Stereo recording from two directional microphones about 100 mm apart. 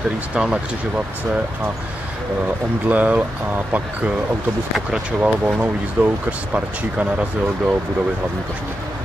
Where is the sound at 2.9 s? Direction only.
15° right (ahead or behind).